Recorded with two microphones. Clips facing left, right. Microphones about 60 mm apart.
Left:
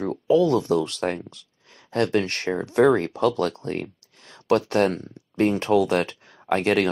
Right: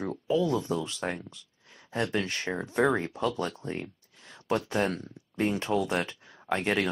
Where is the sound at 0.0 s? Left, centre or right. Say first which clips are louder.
Left 8 dB; left.